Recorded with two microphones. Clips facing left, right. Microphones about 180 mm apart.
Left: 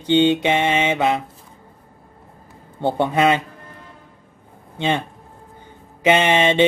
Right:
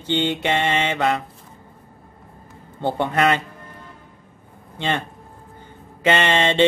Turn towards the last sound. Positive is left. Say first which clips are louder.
# left 3 dB
turn(degrees=15)  # may be behind; listen again after turning